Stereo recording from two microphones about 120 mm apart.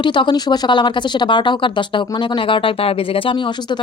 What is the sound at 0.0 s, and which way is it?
Speech, 40° left (ahead or behind).